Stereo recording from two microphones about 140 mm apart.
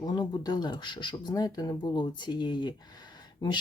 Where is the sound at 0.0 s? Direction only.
30° left (ahead or behind).